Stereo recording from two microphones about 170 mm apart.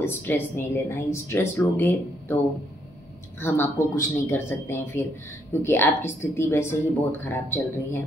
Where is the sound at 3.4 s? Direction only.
15° left (ahead or behind).